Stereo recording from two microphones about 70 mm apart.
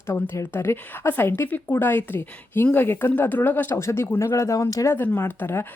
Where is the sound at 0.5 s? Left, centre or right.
Left.